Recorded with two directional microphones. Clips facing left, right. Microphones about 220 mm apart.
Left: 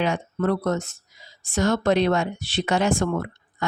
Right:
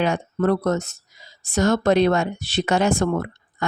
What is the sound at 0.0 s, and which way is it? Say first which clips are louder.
A woman's voice: right 3 dB; 45° right (ahead or behind).